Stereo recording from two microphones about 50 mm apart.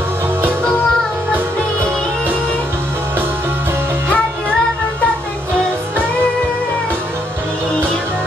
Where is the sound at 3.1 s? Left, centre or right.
Right.